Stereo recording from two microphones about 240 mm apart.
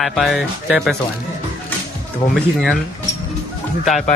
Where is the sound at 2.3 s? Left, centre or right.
Centre.